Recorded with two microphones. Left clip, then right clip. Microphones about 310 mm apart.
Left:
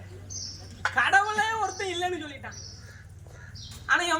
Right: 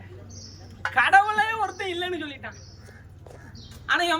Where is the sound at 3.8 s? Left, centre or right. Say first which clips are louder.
Right 1 dB; centre.